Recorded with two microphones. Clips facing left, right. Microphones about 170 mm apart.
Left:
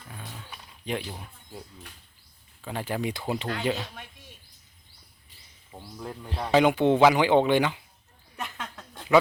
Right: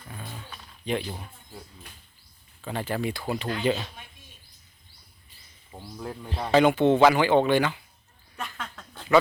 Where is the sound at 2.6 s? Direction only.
10° left (ahead or behind).